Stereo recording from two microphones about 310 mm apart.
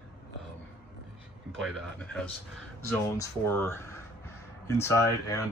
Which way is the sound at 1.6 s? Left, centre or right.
Centre.